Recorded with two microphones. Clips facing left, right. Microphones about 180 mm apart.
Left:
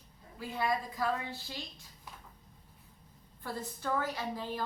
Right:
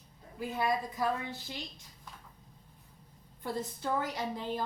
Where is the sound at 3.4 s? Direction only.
20° right (ahead or behind).